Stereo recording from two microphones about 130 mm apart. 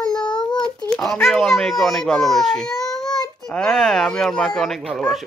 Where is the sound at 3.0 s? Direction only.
30° left (ahead or behind).